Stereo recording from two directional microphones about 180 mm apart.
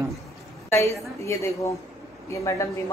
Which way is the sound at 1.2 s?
15° left (ahead or behind).